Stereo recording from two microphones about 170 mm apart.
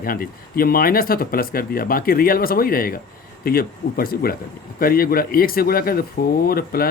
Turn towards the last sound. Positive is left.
turn(degrees=60)  # may be behind; listen again after turning